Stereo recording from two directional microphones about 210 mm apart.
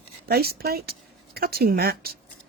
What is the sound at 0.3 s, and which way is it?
Speech, 45° right (ahead or behind).